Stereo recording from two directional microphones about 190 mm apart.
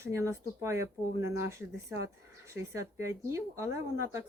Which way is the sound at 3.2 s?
15° right (ahead or behind).